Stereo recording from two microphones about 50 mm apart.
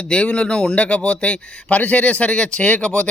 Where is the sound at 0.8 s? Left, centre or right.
Left.